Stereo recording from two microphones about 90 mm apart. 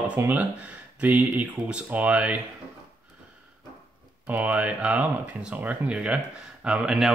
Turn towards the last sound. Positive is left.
turn(degrees=-10)  # may be behind; listen again after turning